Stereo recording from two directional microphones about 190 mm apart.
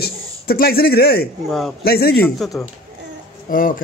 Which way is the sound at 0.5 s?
50° left (ahead or behind).